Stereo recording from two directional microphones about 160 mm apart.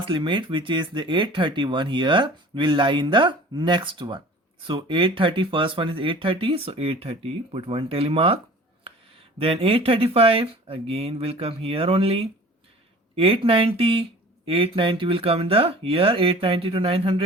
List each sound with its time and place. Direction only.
0.0 s speech: 30° right (ahead or behind)
9.4 s speech: 35° right (ahead or behind)